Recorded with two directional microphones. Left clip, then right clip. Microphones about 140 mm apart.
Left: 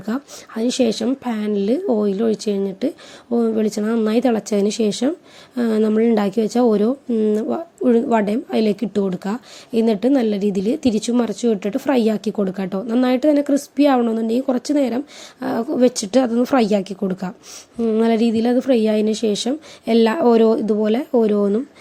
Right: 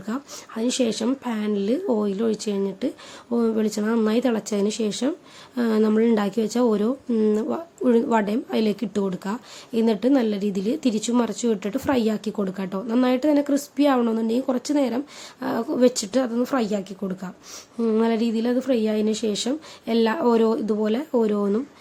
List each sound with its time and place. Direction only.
0.0 s a woman's voice: 30° left (ahead or behind)
7.1 s a woman's voice: 10° left (ahead or behind)